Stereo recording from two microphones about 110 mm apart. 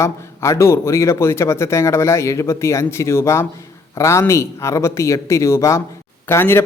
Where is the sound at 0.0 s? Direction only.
25° left (ahead or behind).